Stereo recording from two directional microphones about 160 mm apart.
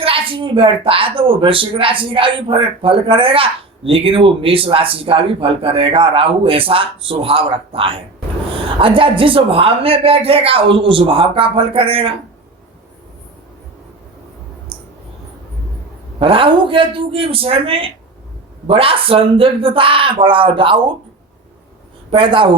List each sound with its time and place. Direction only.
0.0 s speech: 35° right (ahead or behind)
16.2 s speech: 35° right (ahead or behind)
22.1 s speech: 30° right (ahead or behind)